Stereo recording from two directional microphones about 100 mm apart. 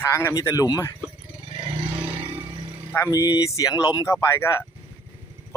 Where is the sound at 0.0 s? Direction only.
25° left (ahead or behind).